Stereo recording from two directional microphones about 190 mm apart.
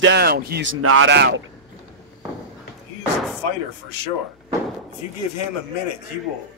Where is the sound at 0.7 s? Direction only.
80° right.